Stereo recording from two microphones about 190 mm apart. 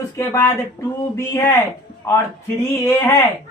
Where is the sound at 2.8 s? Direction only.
15° left (ahead or behind).